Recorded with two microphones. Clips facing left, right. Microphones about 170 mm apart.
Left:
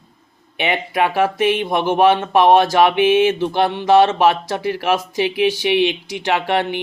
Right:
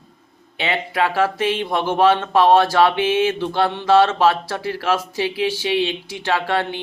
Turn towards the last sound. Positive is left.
turn(degrees=20)  # may be behind; listen again after turning